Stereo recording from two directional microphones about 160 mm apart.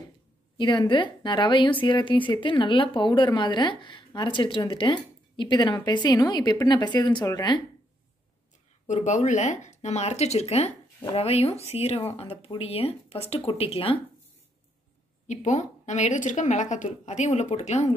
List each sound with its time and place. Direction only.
0.6 s a woman's voice: 30° left (ahead or behind)
8.8 s a woman's voice: 50° left (ahead or behind)
15.2 s a woman's voice: 50° left (ahead or behind)